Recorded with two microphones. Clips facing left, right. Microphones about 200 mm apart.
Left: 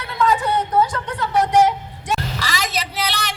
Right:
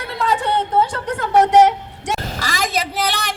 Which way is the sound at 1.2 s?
60° right (ahead or behind).